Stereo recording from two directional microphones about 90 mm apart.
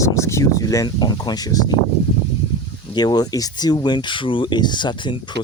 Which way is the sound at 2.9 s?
50° left (ahead or behind).